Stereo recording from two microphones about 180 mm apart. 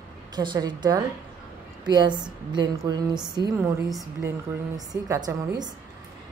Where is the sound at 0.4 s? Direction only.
25° right (ahead or behind).